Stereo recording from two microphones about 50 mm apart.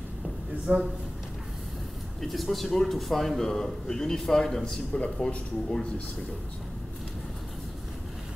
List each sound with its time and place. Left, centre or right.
0.7 s a man's voice: right
2.2 s a man's voice: centre
5.0 s speech: left
5.7 s a man's voice: centre